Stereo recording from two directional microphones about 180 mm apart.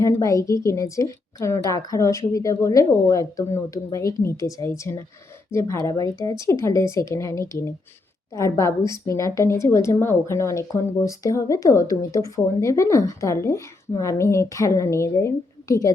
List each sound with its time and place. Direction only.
0.0 s speech: 15° left (ahead or behind)